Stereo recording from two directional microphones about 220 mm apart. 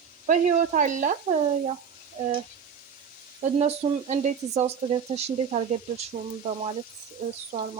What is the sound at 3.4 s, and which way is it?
Speech, 25° right (ahead or behind).